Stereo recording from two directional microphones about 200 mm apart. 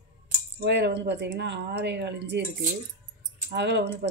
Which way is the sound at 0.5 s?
60° right (ahead or behind).